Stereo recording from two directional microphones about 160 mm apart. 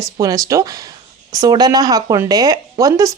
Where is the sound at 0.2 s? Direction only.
20° right (ahead or behind).